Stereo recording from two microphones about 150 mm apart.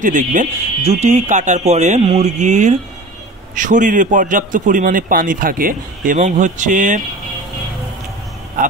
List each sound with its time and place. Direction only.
0.0 s a man's voice: 60° right (ahead or behind)